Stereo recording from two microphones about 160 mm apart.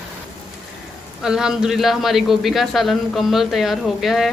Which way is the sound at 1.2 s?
5° right (ahead or behind).